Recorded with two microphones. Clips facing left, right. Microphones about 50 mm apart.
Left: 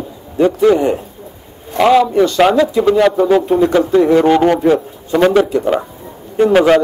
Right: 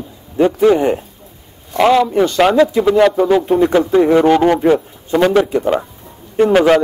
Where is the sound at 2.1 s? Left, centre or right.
Right.